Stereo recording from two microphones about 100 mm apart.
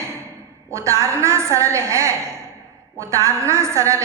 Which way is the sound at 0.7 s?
30° right (ahead or behind).